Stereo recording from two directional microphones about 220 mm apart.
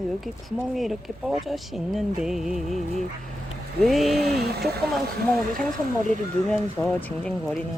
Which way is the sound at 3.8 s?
Centre (ahead or behind).